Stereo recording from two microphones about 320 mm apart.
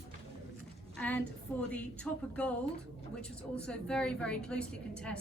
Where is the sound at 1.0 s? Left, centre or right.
Centre.